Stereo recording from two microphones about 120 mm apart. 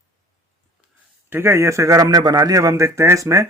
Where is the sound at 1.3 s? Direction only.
20° right (ahead or behind).